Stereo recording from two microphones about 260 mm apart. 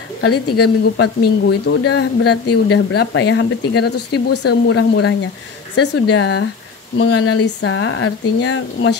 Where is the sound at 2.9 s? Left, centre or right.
Left.